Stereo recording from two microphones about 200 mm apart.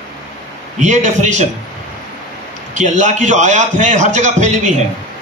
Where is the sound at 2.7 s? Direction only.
35° right (ahead or behind).